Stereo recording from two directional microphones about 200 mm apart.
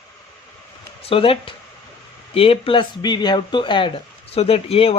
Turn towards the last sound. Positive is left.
turn(degrees=30)  # may be behind; listen again after turning